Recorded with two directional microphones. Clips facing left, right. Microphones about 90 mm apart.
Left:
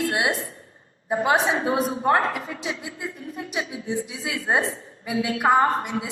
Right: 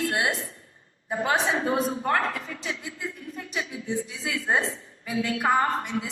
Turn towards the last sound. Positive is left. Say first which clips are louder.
# left 4 dB
turn(degrees=35)  # may be behind; listen again after turning